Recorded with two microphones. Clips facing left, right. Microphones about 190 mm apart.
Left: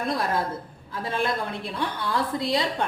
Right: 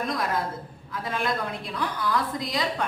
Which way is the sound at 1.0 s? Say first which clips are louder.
Left 2 dB; 30° left (ahead or behind).